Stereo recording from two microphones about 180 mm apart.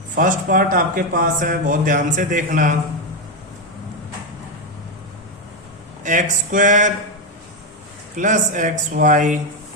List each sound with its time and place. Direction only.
0.2 s speech: 50° right (ahead or behind)
6.0 s speech: 45° right (ahead or behind)
8.1 s speech: 45° right (ahead or behind)